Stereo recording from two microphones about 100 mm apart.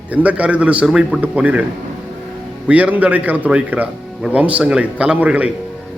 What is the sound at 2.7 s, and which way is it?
A man's voice, 15° right (ahead or behind).